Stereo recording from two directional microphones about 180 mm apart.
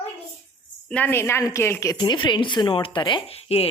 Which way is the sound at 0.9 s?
10° left (ahead or behind).